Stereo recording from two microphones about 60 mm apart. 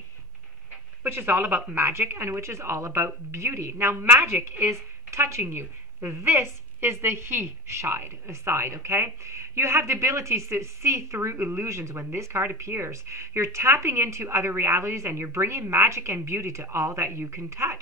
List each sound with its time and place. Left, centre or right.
1.0 s speech: right
1.8 s a woman's voice: right
3.7 s a woman's voice: right